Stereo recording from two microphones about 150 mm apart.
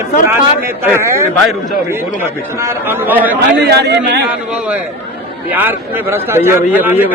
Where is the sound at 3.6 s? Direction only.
90° right.